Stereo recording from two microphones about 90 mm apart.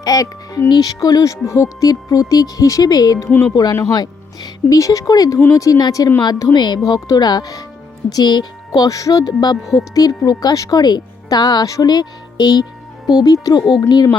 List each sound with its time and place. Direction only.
0.0 s speech: 40° left (ahead or behind)
3.2 s speech: 25° left (ahead or behind)
3.5 s speech: 45° left (ahead or behind)
6.2 s speech: 50° left (ahead or behind)